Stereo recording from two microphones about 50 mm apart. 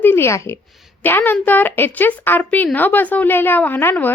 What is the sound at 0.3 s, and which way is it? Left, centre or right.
Speech, left.